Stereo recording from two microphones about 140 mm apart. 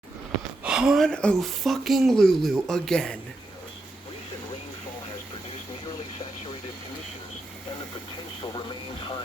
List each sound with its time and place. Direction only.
0.6 s speech: 5° right (ahead or behind)